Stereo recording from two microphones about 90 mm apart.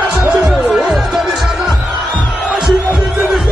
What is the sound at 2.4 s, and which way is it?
Music, 5° right (ahead or behind).